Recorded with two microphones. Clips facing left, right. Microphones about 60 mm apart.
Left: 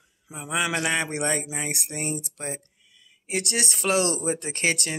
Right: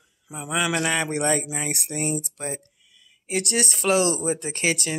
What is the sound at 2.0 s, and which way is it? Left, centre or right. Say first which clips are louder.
Speech: right 4 dB; right.